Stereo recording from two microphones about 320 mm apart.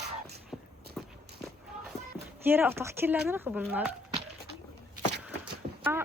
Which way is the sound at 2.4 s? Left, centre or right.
Centre.